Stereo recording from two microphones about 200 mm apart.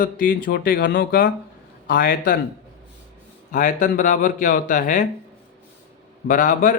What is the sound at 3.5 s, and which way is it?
Speech, 40° left (ahead or behind).